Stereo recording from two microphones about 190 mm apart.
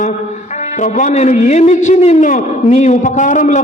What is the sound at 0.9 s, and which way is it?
A man's voice, 40° left (ahead or behind).